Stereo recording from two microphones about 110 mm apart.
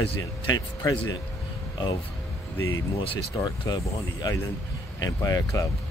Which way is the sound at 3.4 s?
35° left (ahead or behind).